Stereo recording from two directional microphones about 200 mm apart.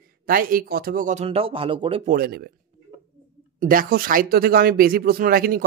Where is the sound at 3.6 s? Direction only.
45° right (ahead or behind).